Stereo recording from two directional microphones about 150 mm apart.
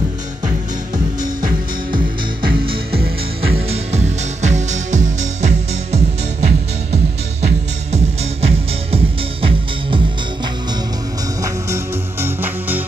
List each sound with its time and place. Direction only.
2.9 s music: 90° right
3.5 s music: 45° right (ahead or behind)
7.4 s music: 45° right (ahead or behind)
11.4 s music: 15° right (ahead or behind)